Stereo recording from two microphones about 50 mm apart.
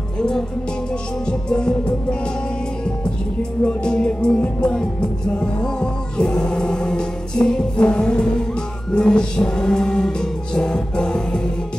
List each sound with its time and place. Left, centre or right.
1.2 s music: centre
3.6 s music: centre